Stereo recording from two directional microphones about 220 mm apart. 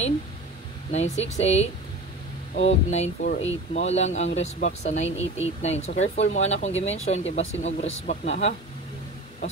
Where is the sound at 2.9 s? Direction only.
35° left (ahead or behind).